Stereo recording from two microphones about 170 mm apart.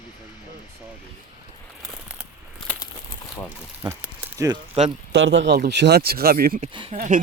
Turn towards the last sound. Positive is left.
turn(degrees=-30)  # may be behind; listen again after turning